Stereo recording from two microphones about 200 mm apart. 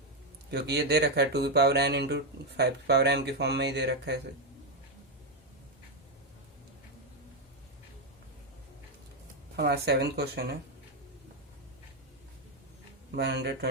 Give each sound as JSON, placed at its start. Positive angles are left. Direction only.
{"t": 0.5, "sound": "speech", "side_deg": -55}
{"t": 9.6, "sound": "speech", "side_deg": -55}
{"t": 13.1, "sound": "speech", "side_deg": -55}